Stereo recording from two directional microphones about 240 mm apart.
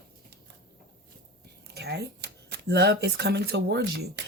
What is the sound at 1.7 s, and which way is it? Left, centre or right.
Speech, right.